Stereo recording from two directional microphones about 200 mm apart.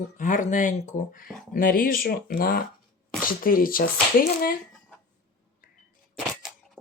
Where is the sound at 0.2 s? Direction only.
40° left (ahead or behind).